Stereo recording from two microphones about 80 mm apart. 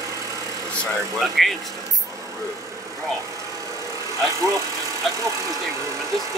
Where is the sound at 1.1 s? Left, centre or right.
Centre.